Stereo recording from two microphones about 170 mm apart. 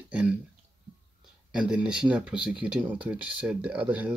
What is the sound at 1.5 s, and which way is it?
Speech, 5° right (ahead or behind).